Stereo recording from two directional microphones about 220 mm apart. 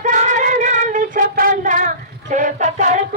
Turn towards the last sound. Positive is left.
turn(degrees=-35)  # may be behind; listen again after turning